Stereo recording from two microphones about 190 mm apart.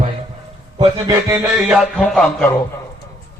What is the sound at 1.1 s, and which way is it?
Music, 15° right (ahead or behind).